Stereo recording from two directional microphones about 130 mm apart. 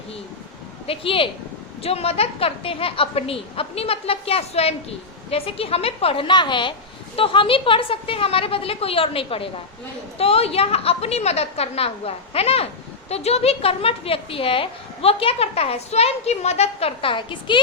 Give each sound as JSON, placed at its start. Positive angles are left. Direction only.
{"t": 0.9, "sound": "a woman's voice", "side_deg": 45}